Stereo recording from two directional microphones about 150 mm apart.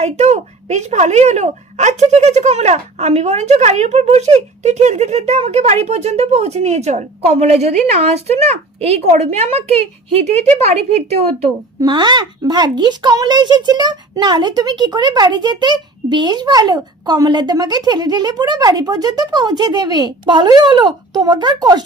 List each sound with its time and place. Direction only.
0.0 s a woman's voice: 50° right (ahead or behind)
11.8 s a woman's voice: 30° right (ahead or behind)